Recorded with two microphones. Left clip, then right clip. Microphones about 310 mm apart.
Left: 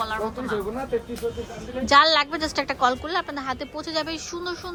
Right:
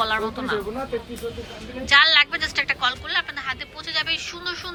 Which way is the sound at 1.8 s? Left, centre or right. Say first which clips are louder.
Right 2 dB; centre.